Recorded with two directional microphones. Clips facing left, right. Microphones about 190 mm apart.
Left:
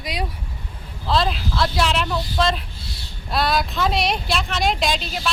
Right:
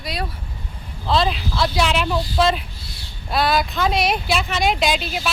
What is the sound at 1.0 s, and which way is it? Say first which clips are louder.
Speech: right 1 dB; centre (ahead or behind).